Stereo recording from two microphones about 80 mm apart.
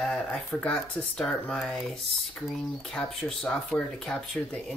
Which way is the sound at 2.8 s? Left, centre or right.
Centre.